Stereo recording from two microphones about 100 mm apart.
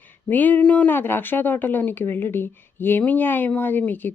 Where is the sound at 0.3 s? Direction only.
20° left (ahead or behind).